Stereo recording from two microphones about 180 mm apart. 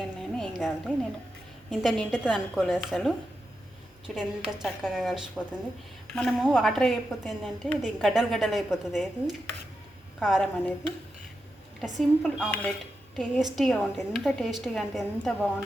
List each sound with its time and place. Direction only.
0.0 s a woman's voice: centre (ahead or behind)
10.2 s a woman's voice: centre (ahead or behind)
11.9 s a woman's voice: centre (ahead or behind)